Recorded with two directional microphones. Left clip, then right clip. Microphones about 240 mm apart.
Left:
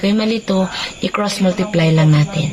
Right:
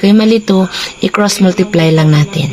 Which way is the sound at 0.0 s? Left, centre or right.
Right.